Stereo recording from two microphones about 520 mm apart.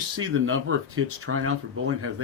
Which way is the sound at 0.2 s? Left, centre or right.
Right.